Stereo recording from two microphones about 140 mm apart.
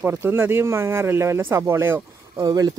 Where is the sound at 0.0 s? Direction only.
20° right (ahead or behind).